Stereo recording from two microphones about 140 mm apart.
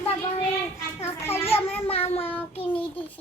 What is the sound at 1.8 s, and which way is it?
Child singing, 45° left (ahead or behind).